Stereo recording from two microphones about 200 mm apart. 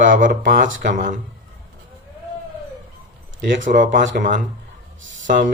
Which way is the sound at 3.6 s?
40° right (ahead or behind).